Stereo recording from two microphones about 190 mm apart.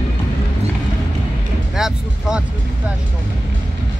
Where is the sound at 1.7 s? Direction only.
5° right (ahead or behind).